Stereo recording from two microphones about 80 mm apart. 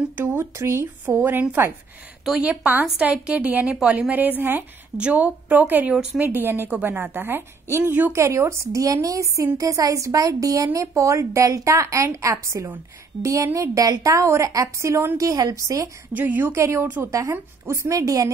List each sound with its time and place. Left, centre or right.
0.2 s a woman's voice: right
1.6 s a woman's voice: right
8.1 s a woman's voice: right
8.8 s a woman's voice: right
16.1 s a woman's voice: right
16.5 s a woman's voice: right